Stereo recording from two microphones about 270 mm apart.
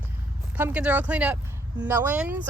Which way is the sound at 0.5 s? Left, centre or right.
Centre.